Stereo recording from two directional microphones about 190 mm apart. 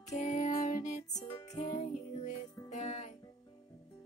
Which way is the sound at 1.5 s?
35° left (ahead or behind).